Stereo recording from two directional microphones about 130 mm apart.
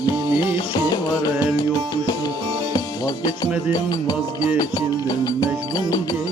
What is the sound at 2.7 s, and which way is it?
Music, 30° left (ahead or behind).